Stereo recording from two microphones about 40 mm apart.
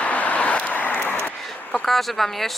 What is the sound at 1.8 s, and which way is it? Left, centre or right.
Speech, centre.